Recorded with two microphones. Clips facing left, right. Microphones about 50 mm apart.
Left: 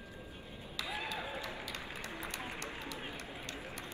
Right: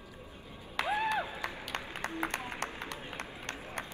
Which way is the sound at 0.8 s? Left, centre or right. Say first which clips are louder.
Right 9 dB; right.